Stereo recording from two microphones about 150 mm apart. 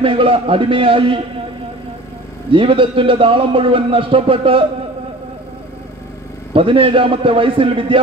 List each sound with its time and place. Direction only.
0.0 s speech: 35° right (ahead or behind)
2.5 s speech: 35° right (ahead or behind)
6.5 s speech: 35° right (ahead or behind)